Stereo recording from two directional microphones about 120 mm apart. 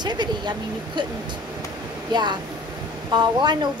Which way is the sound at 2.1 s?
35° right (ahead or behind).